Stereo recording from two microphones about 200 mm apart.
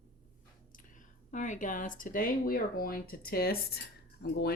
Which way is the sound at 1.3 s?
40° left (ahead or behind).